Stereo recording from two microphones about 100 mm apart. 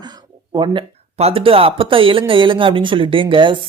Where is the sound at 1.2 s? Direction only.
65° right (ahead or behind).